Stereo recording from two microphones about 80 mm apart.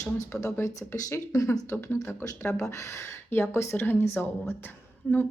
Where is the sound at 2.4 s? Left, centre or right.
Left.